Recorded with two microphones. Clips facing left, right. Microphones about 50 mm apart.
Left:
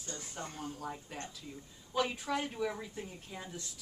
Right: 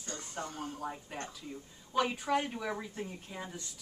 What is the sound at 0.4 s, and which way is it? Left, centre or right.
A woman's voice, centre.